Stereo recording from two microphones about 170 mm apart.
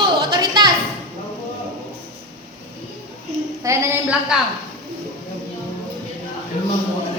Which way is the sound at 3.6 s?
15° right (ahead or behind).